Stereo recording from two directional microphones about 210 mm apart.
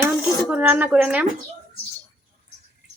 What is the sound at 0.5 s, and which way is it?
Speech, 5° right (ahead or behind).